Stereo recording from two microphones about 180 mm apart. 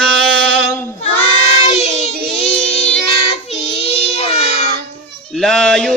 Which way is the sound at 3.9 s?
35° left (ahead or behind).